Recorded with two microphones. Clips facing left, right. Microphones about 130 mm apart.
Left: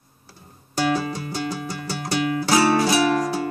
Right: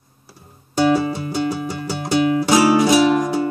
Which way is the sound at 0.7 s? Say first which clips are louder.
Right 6 dB; 25° right (ahead or behind).